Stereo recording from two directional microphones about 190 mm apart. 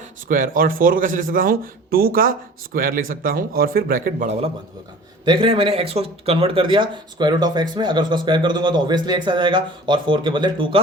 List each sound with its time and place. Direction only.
0.3 s a man's voice: 45° right (ahead or behind); by 10.8 s 25° right (ahead or behind)